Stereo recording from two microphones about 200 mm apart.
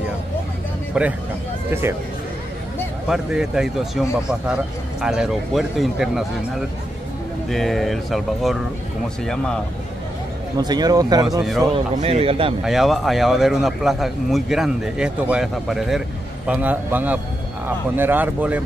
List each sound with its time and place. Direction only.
1.0 s speech: 5° right (ahead or behind)
3.1 s speech: 5° right (ahead or behind)
7.4 s speech: centre (ahead or behind)
10.6 s speech: 20° right (ahead or behind)
12.6 s speech: centre (ahead or behind)